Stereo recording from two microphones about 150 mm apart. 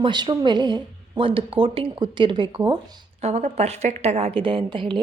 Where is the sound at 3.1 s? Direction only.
45° right (ahead or behind).